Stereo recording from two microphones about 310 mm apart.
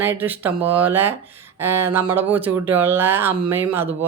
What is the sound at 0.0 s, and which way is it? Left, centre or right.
Speech, centre.